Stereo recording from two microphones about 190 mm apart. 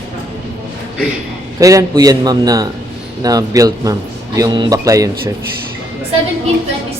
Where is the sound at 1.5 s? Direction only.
20° right (ahead or behind).